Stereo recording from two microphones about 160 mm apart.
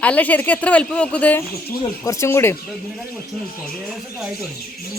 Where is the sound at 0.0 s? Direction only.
10° left (ahead or behind).